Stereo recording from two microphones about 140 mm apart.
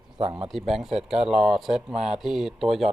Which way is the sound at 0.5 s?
Centre (ahead or behind).